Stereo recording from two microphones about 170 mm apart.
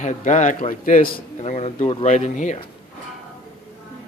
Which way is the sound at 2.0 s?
45° left (ahead or behind).